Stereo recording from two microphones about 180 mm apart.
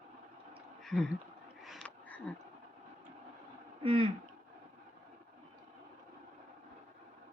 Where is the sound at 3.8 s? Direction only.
30° right (ahead or behind).